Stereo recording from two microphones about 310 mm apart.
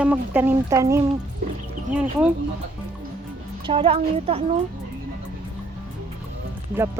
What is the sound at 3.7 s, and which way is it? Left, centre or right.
Speech, centre.